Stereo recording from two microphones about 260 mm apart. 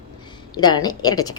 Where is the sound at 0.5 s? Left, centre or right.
Centre.